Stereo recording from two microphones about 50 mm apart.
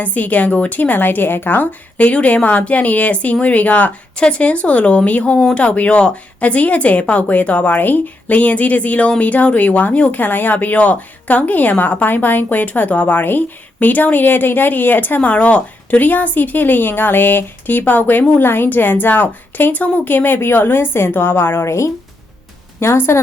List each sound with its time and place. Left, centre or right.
0.0 s a woman's voice: left
15.3 s a woman's voice: left
21.7 s speech: left
22.8 s speech: left